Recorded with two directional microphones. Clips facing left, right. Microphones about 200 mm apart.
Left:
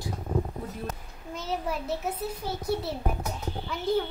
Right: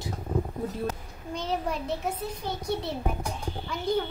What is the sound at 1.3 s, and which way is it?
A child's voice, 5° left (ahead or behind).